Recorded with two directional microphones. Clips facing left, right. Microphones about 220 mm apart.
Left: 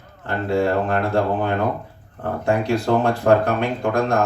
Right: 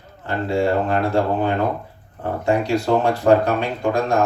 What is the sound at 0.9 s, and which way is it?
Speech, 55° left (ahead or behind).